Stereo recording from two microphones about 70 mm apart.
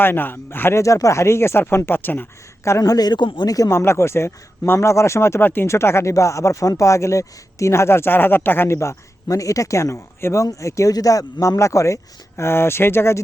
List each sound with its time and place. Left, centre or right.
0.0 s speech: left
0.8 s speech: left
2.8 s a man's voice: left
3.7 s speech: left
5.6 s speech: left
10.4 s speech: left
10.9 s speech: left
12.4 s speech: left